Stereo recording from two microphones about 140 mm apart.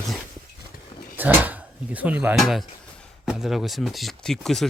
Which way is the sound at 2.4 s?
Centre (ahead or behind).